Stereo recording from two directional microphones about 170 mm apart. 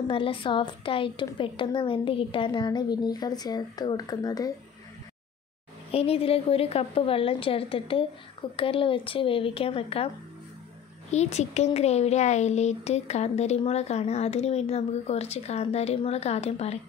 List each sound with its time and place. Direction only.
0.1 s a woman's voice: 30° left (ahead or behind)
5.9 s speech: 35° left (ahead or behind)
11.1 s speech: 40° left (ahead or behind)